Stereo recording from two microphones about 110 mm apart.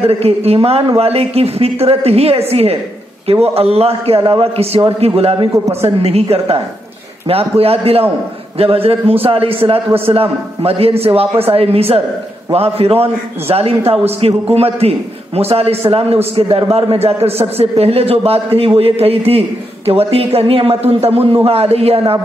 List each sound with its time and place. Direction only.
0.0 s a man's voice: 70° right (ahead or behind)
6.3 s a man's voice: 55° right (ahead or behind)